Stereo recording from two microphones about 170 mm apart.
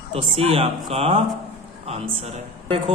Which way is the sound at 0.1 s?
35° right (ahead or behind).